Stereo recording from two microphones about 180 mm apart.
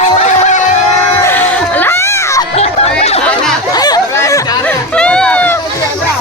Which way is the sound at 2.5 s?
35° left (ahead or behind).